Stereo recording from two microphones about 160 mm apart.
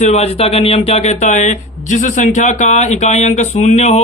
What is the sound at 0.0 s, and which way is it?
Speech, 45° left (ahead or behind).